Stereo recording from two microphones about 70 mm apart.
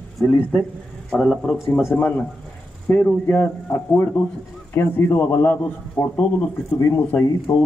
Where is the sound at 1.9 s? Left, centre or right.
Left.